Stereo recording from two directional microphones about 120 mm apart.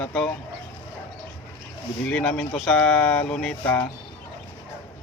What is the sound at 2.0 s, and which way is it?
Speech, 10° left (ahead or behind).